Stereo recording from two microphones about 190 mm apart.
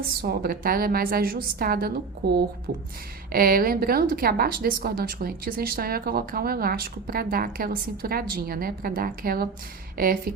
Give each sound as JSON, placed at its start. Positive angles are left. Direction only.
{"t": 0.0, "sound": "a woman's voice", "side_deg": -50}